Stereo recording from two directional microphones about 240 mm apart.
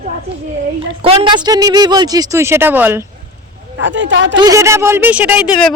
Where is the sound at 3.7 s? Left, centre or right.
Right.